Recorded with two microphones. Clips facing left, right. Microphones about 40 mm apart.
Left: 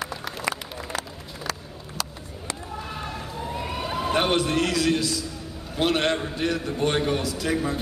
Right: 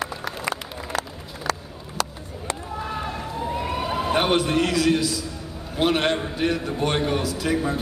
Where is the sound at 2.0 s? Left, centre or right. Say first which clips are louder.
Right 6 dB; right.